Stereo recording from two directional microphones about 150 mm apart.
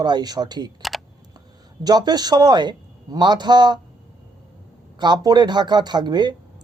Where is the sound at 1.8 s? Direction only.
25° right (ahead or behind).